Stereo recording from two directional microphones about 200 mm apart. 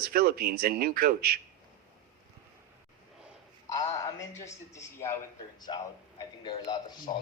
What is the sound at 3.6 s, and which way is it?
Speech, 15° left (ahead or behind).